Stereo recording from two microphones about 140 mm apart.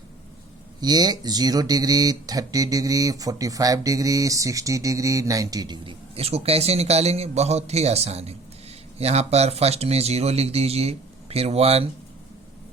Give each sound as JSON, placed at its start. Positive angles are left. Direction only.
{"t": 0.8, "sound": "speech", "side_deg": -30}
{"t": 6.1, "sound": "speech", "side_deg": -45}